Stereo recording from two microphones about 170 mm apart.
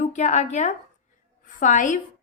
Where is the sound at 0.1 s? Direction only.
45° left (ahead or behind).